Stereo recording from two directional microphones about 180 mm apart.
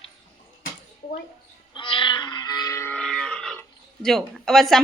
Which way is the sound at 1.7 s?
25° left (ahead or behind).